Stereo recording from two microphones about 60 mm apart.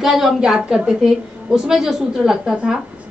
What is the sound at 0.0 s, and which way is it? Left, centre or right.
A woman's voice, centre.